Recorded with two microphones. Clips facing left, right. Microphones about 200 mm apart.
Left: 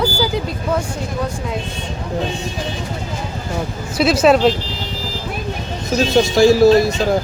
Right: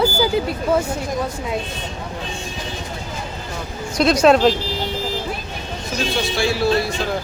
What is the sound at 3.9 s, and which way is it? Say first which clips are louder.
Speech: left 1 dB; 5° left (ahead or behind).